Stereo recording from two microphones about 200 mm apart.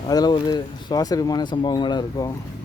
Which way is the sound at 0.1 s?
20° left (ahead or behind).